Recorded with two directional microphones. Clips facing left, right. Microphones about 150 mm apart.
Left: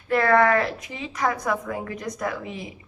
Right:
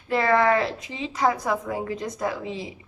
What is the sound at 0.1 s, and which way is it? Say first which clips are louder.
A woman's voice: left 1 dB; 25° right (ahead or behind).